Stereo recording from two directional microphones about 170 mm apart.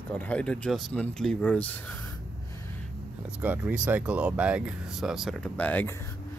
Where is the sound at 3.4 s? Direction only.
10° right (ahead or behind); by 6.1 s 15° left (ahead or behind).